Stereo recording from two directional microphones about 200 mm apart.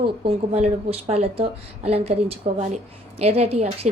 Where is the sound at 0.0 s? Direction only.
30° right (ahead or behind).